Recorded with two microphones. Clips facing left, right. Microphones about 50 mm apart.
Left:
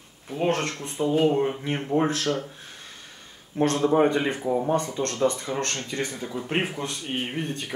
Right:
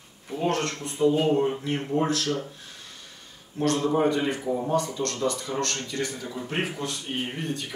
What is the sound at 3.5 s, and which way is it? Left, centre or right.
A man's voice, left.